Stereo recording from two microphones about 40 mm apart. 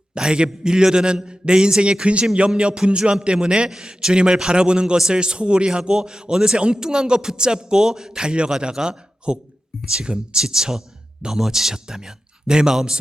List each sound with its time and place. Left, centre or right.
0.1 s a man's voice: right